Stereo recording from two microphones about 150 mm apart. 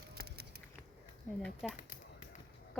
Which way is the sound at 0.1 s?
90° right.